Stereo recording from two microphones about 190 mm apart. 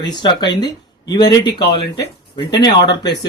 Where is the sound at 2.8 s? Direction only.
65° left (ahead or behind).